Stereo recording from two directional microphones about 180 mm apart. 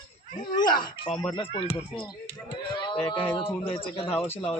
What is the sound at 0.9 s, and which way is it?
Speech, 30° left (ahead or behind).